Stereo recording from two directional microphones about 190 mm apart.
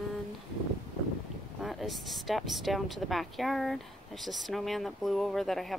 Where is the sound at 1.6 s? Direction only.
Centre (ahead or behind).